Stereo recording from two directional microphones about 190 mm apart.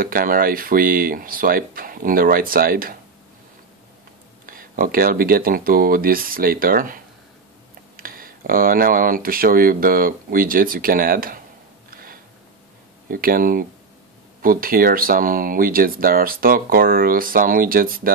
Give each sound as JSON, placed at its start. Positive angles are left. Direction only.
{"t": 0.0, "sound": "speech", "side_deg": -50}
{"t": 4.5, "sound": "speech", "side_deg": -45}
{"t": 8.0, "sound": "speech", "side_deg": -50}
{"t": 11.9, "sound": "a sound", "side_deg": -50}
{"t": 13.1, "sound": "speech", "side_deg": -50}